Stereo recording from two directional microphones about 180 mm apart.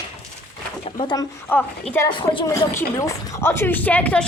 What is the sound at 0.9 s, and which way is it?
Speech, 25° left (ahead or behind).